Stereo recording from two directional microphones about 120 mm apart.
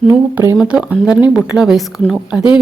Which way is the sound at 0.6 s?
5° right (ahead or behind).